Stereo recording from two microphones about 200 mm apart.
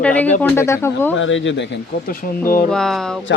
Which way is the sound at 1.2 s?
70° left (ahead or behind).